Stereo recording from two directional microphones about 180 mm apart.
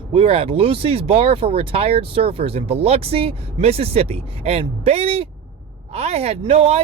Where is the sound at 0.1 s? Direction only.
30° right (ahead or behind).